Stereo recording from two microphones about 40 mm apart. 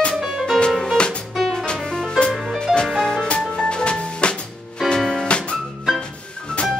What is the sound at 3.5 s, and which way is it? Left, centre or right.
Music, left.